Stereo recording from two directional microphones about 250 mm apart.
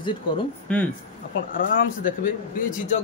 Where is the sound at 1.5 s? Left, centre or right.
Left.